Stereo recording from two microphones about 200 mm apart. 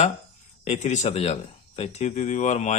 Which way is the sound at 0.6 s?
35° left (ahead or behind).